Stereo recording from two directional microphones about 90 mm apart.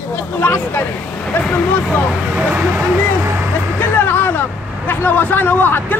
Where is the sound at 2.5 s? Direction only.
20° right (ahead or behind).